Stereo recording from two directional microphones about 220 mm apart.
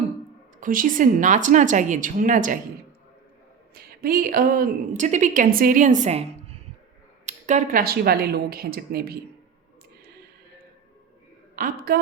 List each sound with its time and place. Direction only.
0.6 s a woman's voice: 40° right (ahead or behind)
3.8 s a woman's voice: 40° right (ahead or behind)
7.3 s speech: 35° right (ahead or behind)
11.5 s a woman's voice: 40° right (ahead or behind)